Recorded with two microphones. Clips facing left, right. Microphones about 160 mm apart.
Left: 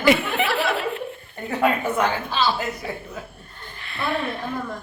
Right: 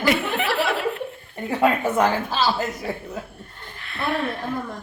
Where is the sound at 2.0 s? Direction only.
40° right (ahead or behind).